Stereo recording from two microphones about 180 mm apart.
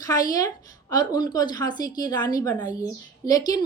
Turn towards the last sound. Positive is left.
turn(degrees=20)  # may be behind; listen again after turning